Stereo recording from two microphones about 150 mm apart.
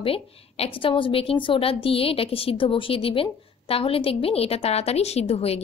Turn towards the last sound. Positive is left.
turn(degrees=40)  # may be behind; listen again after turning